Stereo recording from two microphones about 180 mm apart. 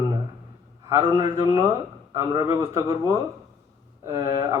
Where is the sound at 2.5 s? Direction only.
15° right (ahead or behind).